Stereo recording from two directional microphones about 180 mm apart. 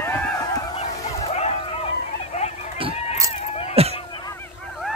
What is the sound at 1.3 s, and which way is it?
Bow-wow, 35° left (ahead or behind).